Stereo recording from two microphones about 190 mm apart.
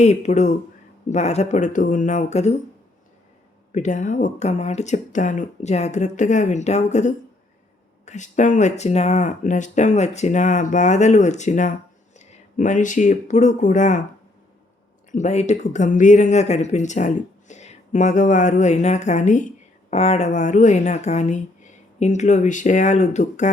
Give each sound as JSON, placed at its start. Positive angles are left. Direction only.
{"t": 0.0, "sound": "speech", "side_deg": 35}
{"t": 3.7, "sound": "speech", "side_deg": 40}
{"t": 15.1, "sound": "speech", "side_deg": 40}